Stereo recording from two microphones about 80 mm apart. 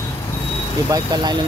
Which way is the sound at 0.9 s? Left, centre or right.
Right.